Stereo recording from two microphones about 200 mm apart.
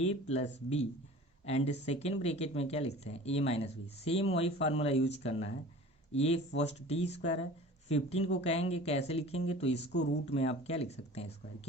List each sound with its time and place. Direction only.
0.0 s speech: 35° left (ahead or behind)
6.1 s speech: 30° left (ahead or behind)
8.2 s speech: 65° left (ahead or behind)
8.4 s speech: 30° left (ahead or behind)
9.7 s speech: 60° left (ahead or behind)
10.3 s speech: 30° left (ahead or behind)